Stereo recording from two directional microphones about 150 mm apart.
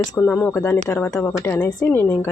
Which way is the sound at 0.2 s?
15° left (ahead or behind).